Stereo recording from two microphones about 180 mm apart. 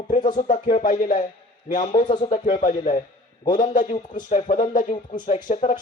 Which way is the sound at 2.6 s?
45° left (ahead or behind).